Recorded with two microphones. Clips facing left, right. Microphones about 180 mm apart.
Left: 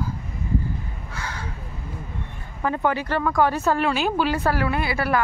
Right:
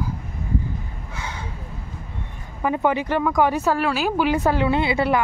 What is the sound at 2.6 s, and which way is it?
Speech, 15° right (ahead or behind).